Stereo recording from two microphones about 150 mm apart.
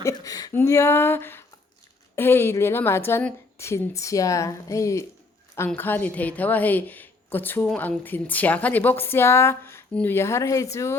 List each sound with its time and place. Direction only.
0.0 s a woman's voice: 25° left (ahead or behind)